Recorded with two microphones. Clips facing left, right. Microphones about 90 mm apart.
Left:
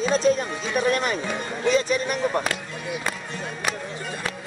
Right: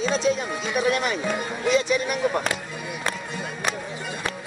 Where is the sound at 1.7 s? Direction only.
40° left (ahead or behind).